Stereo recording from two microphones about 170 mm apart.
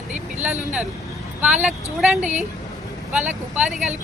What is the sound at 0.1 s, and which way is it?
Speech, 45° right (ahead or behind).